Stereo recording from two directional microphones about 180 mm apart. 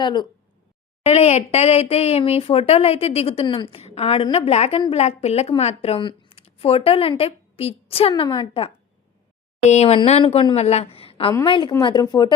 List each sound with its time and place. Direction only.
0.0 s speech: 25° left (ahead or behind)
1.0 s a woman's voice: 35° left (ahead or behind)